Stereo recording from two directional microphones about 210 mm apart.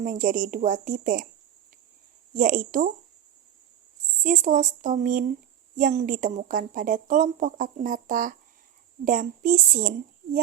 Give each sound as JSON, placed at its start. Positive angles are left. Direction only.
{"t": 0.0, "sound": "speech", "side_deg": -40}
{"t": 2.3, "sound": "speech", "side_deg": -40}
{"t": 4.2, "sound": "speech", "side_deg": -40}